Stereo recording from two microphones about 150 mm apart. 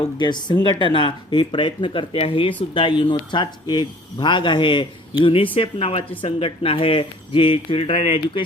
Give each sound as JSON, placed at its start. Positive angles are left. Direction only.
{"t": 0.2, "sound": "speech", "side_deg": 30}